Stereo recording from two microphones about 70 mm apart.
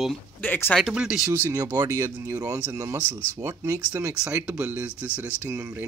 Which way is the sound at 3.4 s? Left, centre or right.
Right.